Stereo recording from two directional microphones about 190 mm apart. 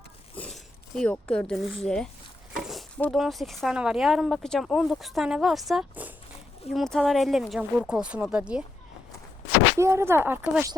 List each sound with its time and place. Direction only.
0.3 s speech: 5° left (ahead or behind)
9.7 s speech: 15° right (ahead or behind)